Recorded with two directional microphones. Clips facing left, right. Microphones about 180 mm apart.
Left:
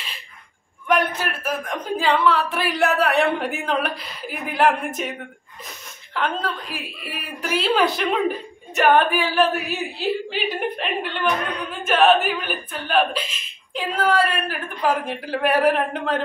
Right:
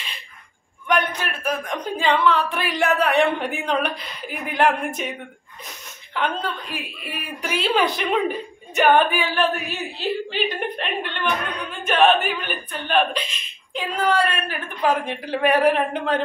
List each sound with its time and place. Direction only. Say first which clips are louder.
0.8 s speech: left 2 dB; 5° left (ahead or behind)
6.1 s a woman's voice: even; centre (ahead or behind)